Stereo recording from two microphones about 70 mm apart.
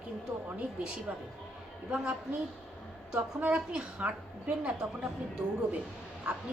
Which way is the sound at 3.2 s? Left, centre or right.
Right.